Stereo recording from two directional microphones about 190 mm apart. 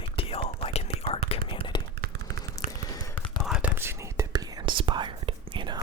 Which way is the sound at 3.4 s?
5° right (ahead or behind).